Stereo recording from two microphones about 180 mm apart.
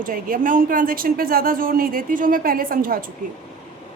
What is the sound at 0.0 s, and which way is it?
A woman's voice, 50° right (ahead or behind).